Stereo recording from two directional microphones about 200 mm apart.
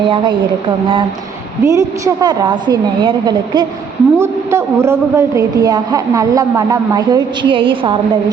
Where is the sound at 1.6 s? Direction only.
15° right (ahead or behind).